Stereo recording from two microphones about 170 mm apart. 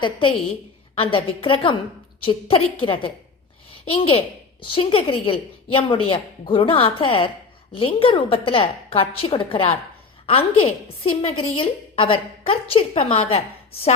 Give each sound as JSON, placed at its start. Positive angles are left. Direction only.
{"t": 0.0, "sound": "a woman's voice", "side_deg": 30}